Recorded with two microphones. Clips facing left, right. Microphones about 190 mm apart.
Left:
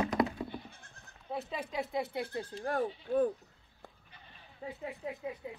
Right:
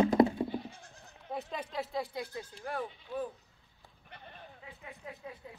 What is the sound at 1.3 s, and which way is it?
Speech, 5° left (ahead or behind).